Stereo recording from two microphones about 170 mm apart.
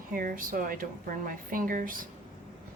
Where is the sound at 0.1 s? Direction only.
55° right (ahead or behind).